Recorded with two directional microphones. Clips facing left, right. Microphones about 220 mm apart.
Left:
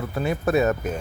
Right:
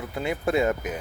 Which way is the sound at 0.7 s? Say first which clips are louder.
Left 3 dB; 15° right (ahead or behind).